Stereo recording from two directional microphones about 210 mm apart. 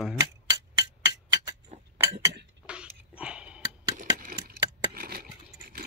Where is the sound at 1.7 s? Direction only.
30° right (ahead or behind).